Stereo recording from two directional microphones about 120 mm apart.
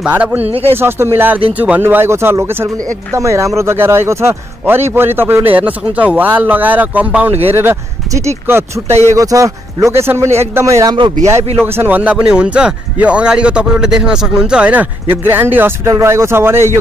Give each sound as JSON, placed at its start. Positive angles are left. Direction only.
{"t": 0.0, "sound": "a man's voice", "side_deg": -10}
{"t": 0.4, "sound": "speech", "side_deg": -55}
{"t": 0.7, "sound": "a man's voice", "side_deg": -20}